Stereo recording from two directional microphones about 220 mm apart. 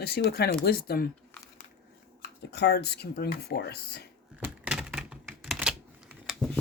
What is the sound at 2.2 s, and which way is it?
Speech, 50° left (ahead or behind).